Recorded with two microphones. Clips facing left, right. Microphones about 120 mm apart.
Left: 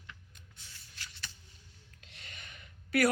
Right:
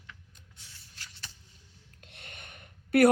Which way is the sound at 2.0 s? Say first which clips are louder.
Right 3 dB; 55° right (ahead or behind).